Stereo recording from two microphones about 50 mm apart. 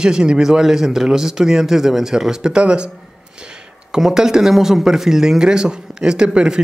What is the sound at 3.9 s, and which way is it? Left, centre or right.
Speech, centre.